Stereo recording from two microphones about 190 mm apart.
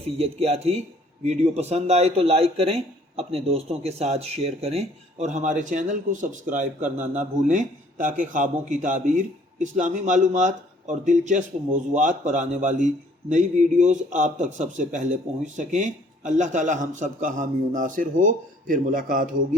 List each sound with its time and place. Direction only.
0.2 s a man's voice: 30° right (ahead or behind)